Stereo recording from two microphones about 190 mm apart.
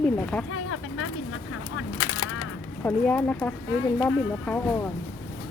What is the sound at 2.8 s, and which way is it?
Speech, 10° left (ahead or behind).